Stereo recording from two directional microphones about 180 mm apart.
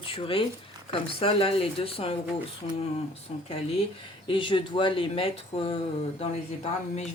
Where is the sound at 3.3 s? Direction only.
35° left (ahead or behind).